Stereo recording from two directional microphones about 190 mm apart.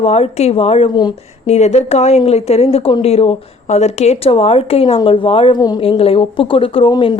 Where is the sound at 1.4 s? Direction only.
35° left (ahead or behind).